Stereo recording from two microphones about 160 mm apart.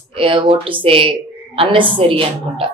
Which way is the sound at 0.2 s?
35° right (ahead or behind).